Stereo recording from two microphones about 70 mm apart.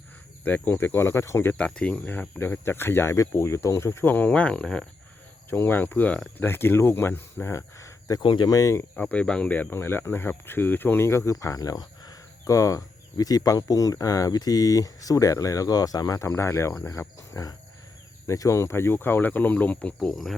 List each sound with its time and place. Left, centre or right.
0.4 s speech: left
1.5 s speech: centre
2.4 s speech: left
4.0 s speech: left
5.5 s speech: left
7.5 s cricket: left
8.3 s speech: left
8.5 s speech: left
9.0 s speech: centre
9.7 s speech: left
12.5 s speech: left
16.2 s speech: left
20.1 s speech: centre